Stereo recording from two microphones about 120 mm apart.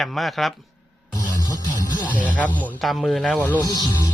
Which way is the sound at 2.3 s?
10° left (ahead or behind).